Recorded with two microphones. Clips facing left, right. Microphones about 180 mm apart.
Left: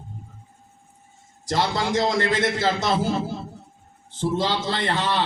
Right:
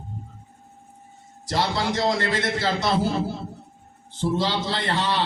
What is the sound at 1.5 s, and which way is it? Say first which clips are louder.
A man's voice: left 1 dB; 50° left (ahead or behind).